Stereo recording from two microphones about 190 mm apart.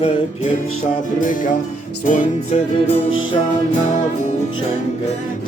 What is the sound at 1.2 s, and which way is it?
Speech, 45° left (ahead or behind).